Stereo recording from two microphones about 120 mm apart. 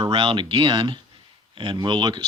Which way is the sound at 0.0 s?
50° right (ahead or behind).